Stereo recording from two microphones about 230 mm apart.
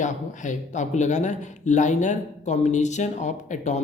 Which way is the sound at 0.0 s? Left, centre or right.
Left.